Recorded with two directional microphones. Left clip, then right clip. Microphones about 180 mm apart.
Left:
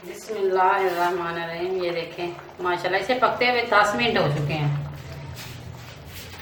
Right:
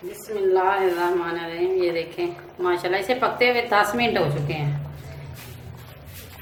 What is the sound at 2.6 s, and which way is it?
A woman's voice, 55° right (ahead or behind).